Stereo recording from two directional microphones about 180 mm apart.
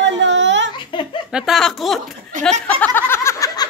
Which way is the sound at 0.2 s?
85° right.